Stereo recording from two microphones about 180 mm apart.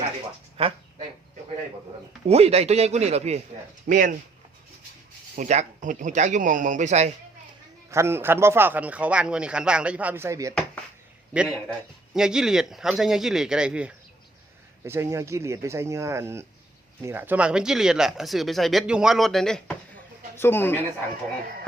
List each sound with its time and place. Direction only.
0.5 s duck: 30° right (ahead or behind)
2.2 s speech: 35° right (ahead or behind)
5.4 s speech: 40° right (ahead or behind)
7.9 s speech: 15° right (ahead or behind)
11.3 s speech: centre (ahead or behind)